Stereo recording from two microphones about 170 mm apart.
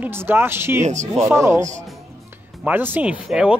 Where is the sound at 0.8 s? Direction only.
45° right (ahead or behind).